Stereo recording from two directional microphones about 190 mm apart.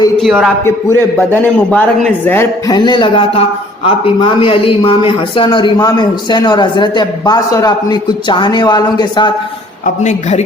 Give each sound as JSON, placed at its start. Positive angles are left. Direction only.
{"t": 0.2, "sound": "a man's voice", "side_deg": 0}
{"t": 0.6, "sound": "a man's voice", "side_deg": 15}
{"t": 9.8, "sound": "a woman's voice", "side_deg": 40}